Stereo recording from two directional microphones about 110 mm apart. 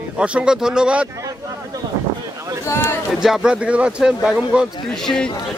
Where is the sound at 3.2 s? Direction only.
5° right (ahead or behind).